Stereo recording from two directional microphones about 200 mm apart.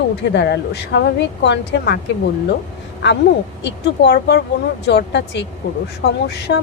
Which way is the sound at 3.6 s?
55° left (ahead or behind).